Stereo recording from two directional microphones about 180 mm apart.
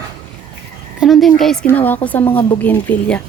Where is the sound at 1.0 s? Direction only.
Centre (ahead or behind).